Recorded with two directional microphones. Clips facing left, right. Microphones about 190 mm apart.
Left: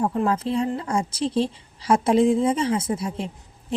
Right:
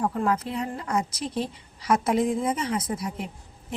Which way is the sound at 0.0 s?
25° left (ahead or behind).